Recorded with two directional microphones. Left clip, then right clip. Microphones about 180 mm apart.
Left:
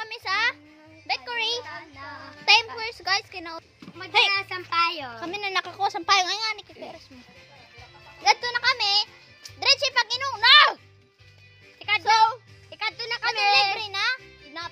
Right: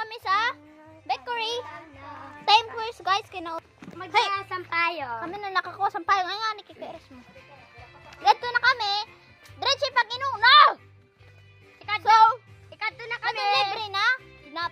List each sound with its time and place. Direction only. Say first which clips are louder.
0.0 s a sound: even; 5° right (ahead or behind)
1.0 s music: left 1 dB; 10° right (ahead or behind)
2.4 s a sound: left 1 dB; 5° right (ahead or behind)
4.1 s speech: left 3 dB; 10° left (ahead or behind)
4.7 s a woman's voice: left 2 dB; 80° left
5.2 s speech: left 3 dB; 30° left (ahead or behind)
6.4 s a child's voice: even; 5° left (ahead or behind)
8.2 s a child's voice: right 1 dB; centre (ahead or behind); by 10.8 s 15° left (ahead or behind)
12.0 s a child's voice: right 3 dB; centre (ahead or behind)
12.7 s music: left 2 dB; 35° left (ahead or behind)
13.7 s music: right 2 dB; centre (ahead or behind)